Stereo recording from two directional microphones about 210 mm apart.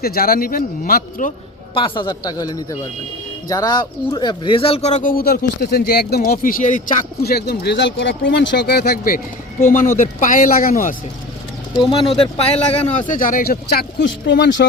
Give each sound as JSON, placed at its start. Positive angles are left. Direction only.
{"t": 0.0, "sound": "speech", "side_deg": 45}
{"t": 1.7, "sound": "a man's voice", "side_deg": 20}
{"t": 7.3, "sound": "speech", "side_deg": 50}
{"t": 11.9, "sound": "speech", "side_deg": 25}